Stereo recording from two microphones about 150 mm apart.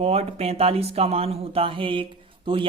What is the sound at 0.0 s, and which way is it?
Speech, 40° right (ahead or behind).